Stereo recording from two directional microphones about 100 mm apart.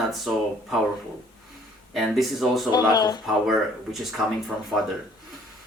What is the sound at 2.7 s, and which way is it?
Speech, 45° left (ahead or behind).